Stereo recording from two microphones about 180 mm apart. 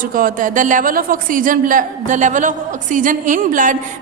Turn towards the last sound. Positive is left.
turn(degrees=-45)  # may be behind; listen again after turning